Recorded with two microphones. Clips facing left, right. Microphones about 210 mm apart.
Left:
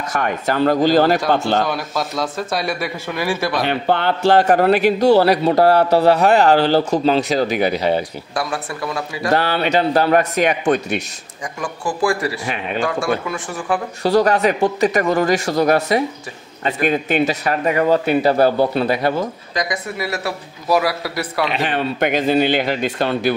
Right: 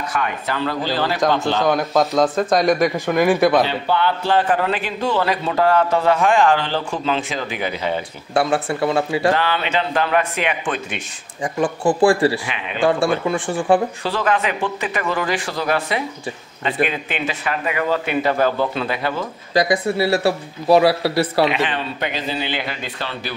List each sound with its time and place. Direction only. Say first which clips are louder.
0.1 s speech: left 6 dB; 45° left (ahead or behind)
2.7 s speech: right 7 dB; 15° right (ahead or behind)
3.6 s speech: left 2 dB; 55° left (ahead or behind); by 4.5 s 75° left (ahead or behind)
4.5 s a man's voice: left 7 dB; 40° left (ahead or behind)
8.4 s speech: right 6 dB; 30° right (ahead or behind)
9.3 s a man's voice: left 3 dB; 40° left (ahead or behind)
11.4 s speech: right 6 dB; 30° right (ahead or behind)
12.4 s speech: left 5 dB; 45° left (ahead or behind)
12.8 s speech: right 5 dB; 30° right (ahead or behind)
14.0 s a man's voice: left 6 dB; 40° left (ahead or behind)
19.5 s speech: right 10 dB; 30° right (ahead or behind)
21.5 s speech: left 1 dB; 40° left (ahead or behind)